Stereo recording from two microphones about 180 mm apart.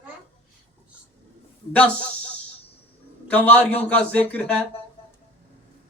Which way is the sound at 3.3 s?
10° left (ahead or behind).